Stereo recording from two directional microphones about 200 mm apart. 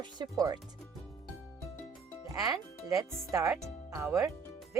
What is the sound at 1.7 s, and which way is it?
Music, 10° left (ahead or behind).